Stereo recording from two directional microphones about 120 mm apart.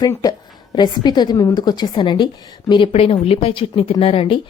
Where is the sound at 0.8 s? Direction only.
35° left (ahead or behind).